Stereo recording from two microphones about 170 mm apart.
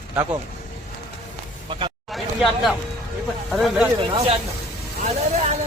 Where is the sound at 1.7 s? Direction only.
30° right (ahead or behind).